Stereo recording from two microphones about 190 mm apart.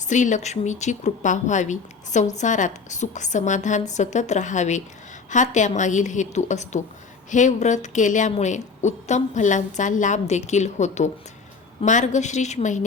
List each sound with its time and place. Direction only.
0.1 s speech: 40° left (ahead or behind)